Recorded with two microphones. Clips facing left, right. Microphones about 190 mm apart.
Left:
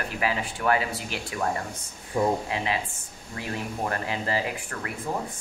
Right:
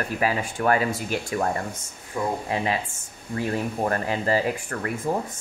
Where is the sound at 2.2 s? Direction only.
25° left (ahead or behind).